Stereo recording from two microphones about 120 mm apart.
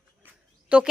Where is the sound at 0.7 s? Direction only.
10° right (ahead or behind).